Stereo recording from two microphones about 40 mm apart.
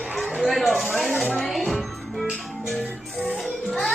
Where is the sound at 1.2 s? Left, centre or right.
Centre.